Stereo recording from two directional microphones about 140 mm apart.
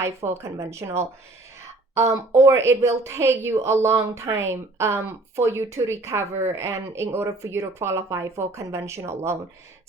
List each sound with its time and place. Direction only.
0.0 s a woman's voice: 20° right (ahead or behind)